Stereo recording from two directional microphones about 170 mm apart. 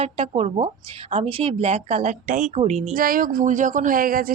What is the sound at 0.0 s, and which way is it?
Speech, 40° right (ahead or behind).